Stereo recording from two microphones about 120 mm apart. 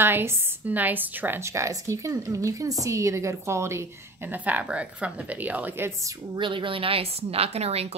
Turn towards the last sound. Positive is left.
turn(degrees=-60)  # may be behind; listen again after turning